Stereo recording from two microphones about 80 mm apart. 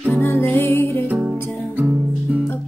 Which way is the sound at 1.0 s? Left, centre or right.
Centre.